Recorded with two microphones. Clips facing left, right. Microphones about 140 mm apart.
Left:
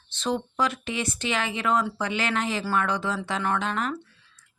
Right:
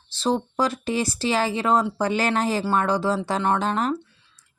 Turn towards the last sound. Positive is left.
turn(degrees=-35)  # may be behind; listen again after turning